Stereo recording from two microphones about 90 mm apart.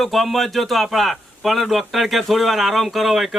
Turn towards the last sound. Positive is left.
turn(degrees=0)  # may be behind; listen again after turning